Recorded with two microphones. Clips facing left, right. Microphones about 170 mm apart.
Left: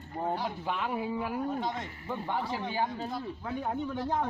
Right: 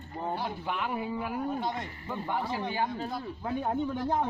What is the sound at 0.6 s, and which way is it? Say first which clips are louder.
Speech: even; 15° left (ahead or behind).